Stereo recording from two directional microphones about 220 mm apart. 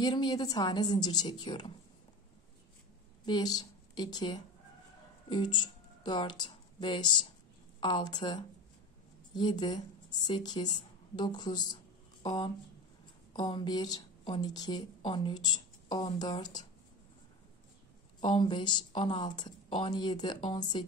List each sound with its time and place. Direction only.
0.0 s speech: 20° left (ahead or behind)
3.3 s a woman's voice: 20° left (ahead or behind)
18.2 s speech: 20° left (ahead or behind)